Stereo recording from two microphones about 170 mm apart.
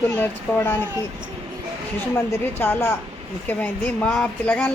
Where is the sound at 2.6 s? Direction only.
10° left (ahead or behind).